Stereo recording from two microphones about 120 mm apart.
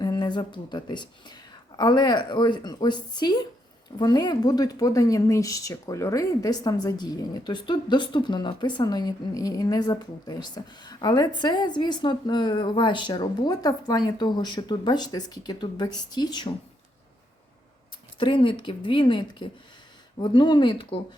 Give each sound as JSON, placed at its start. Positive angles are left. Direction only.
{"t": 0.0, "sound": "a woman's voice", "side_deg": 35}
{"t": 18.2, "sound": "a woman's voice", "side_deg": 45}